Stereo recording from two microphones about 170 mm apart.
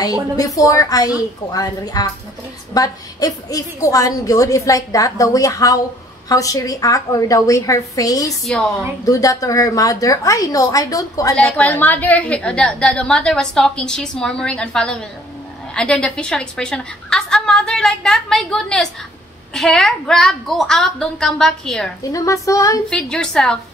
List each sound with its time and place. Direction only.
0.0 s a woman's voice: 20° left (ahead or behind)
8.5 s a woman's voice: 5° left (ahead or behind)
9.0 s a woman's voice: 20° left (ahead or behind)
11.3 s a woman's voice: 5° left (ahead or behind)
22.0 s a woman's voice: 20° left (ahead or behind)
22.8 s a woman's voice: 5° left (ahead or behind)